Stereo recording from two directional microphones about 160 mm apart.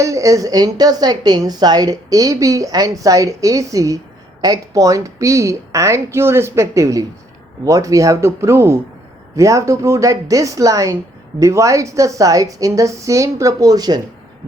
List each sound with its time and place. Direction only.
0.0 s a woman's voice: 20° right (ahead or behind)